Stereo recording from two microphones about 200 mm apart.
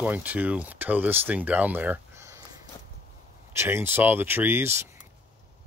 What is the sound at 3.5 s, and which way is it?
Speech, 10° right (ahead or behind).